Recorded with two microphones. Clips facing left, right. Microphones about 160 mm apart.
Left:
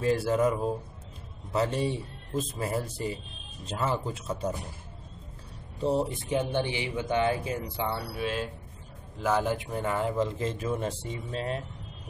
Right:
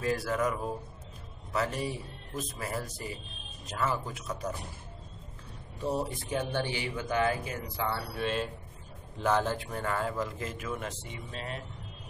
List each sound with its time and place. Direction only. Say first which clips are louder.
0.0 s a man's voice: left 5 dB; 25° left (ahead or behind)
5.8 s a man's voice: left 5 dB; 25° left (ahead or behind)
8.2 s a man's voice: right 2 dB; 5° left (ahead or behind); by 11.6 s 35° left (ahead or behind)